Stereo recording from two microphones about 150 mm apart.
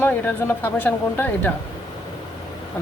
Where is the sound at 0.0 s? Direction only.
10° left (ahead or behind).